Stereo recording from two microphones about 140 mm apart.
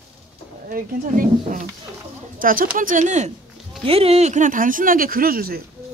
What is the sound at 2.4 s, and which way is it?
Speech, 85° right.